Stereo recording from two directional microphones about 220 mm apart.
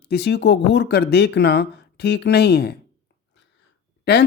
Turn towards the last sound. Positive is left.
turn(degrees=50)  # may be behind; listen again after turning